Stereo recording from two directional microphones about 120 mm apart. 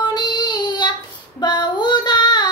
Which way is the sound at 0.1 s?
35° left (ahead or behind).